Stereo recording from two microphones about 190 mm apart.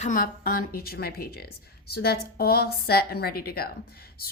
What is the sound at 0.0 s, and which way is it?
A woman's voice, 45° left (ahead or behind).